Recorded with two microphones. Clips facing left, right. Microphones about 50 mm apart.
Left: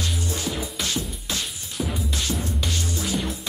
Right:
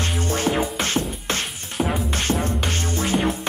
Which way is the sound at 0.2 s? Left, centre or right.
Right.